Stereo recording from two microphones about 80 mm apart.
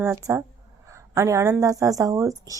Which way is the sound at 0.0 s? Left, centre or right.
Right.